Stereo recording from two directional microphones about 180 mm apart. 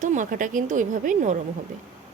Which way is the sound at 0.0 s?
45° right (ahead or behind).